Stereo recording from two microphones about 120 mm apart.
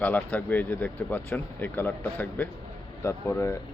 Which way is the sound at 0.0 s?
10° left (ahead or behind).